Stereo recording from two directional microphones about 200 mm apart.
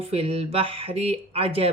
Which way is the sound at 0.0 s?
30° right (ahead or behind).